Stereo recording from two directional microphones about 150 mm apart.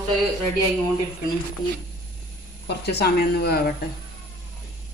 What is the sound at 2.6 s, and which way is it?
Speech, 90° left.